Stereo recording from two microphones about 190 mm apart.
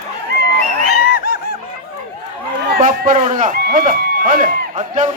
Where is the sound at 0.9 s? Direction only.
50° left (ahead or behind).